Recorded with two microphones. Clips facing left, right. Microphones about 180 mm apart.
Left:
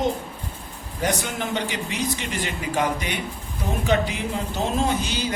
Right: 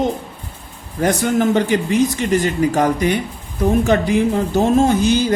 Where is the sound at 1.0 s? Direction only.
50° right (ahead or behind).